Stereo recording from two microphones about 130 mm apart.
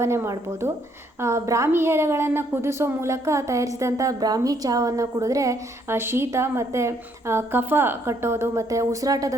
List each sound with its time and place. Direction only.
0.0 s a woman's voice: 20° right (ahead or behind)